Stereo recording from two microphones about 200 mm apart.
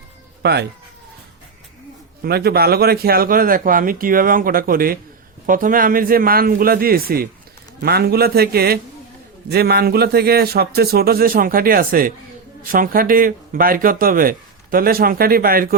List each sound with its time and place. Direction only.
0.4 s speech: 60° right (ahead or behind)
2.2 s speech: 50° right (ahead or behind)